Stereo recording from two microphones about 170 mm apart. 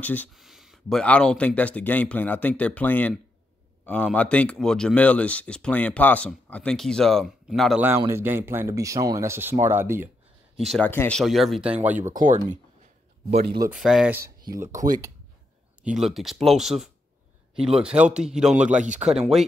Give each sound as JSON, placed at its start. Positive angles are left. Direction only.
{"t": 0.0, "sound": "a man's voice", "side_deg": 10}
{"t": 0.3, "sound": "a man's voice", "side_deg": 0}
{"t": 8.1, "sound": "speech", "side_deg": -15}
{"t": 10.6, "sound": "a man's voice", "side_deg": 0}
{"t": 10.9, "sound": "a man's voice", "side_deg": 15}
{"t": 11.1, "sound": "a man's voice", "side_deg": 0}
{"t": 12.1, "sound": "speech", "side_deg": -50}
{"t": 13.7, "sound": "a man's voice", "side_deg": 0}
{"t": 14.4, "sound": "speech", "side_deg": -20}
{"t": 15.8, "sound": "a man's voice", "side_deg": 0}